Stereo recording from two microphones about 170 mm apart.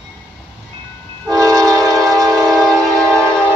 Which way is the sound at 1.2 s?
20° right (ahead or behind).